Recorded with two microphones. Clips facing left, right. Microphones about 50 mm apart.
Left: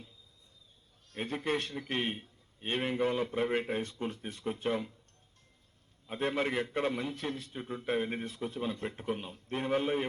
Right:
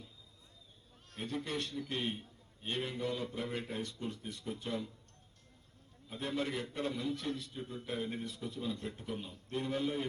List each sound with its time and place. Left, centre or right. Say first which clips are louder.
1.1 s a man's voice: left 5 dB; left
6.1 s a man's voice: left 5 dB; left